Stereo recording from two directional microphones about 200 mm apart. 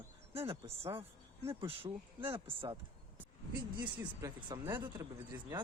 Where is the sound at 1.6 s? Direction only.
15° right (ahead or behind).